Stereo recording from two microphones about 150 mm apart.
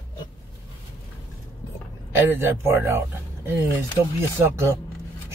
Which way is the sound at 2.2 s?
15° right (ahead or behind).